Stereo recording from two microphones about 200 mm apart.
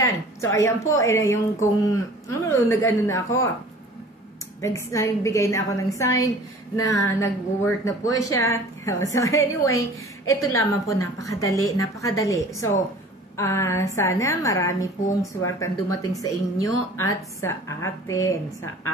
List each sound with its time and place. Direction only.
0.0 s a woman's voice: 15° left (ahead or behind)
4.6 s a woman's voice: 15° left (ahead or behind)